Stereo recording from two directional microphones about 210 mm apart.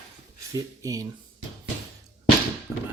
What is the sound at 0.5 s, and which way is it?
Speech, 15° right (ahead or behind).